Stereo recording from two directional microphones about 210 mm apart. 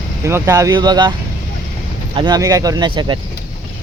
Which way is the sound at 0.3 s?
15° right (ahead or behind).